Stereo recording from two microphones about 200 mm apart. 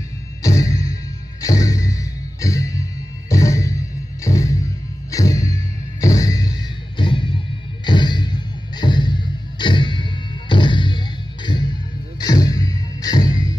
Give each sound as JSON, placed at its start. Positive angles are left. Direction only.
{"t": 0.4, "sound": "music", "side_deg": 15}